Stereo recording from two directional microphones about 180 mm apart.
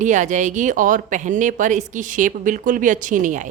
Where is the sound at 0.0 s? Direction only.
40° right (ahead or behind).